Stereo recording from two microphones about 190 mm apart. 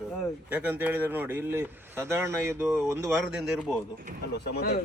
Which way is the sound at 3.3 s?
Centre (ahead or behind).